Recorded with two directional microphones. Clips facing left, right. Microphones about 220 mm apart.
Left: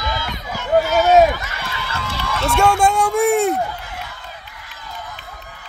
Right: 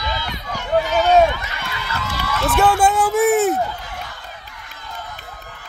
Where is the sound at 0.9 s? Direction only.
5° left (ahead or behind).